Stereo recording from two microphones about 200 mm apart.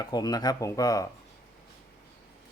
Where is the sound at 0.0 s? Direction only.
20° left (ahead or behind).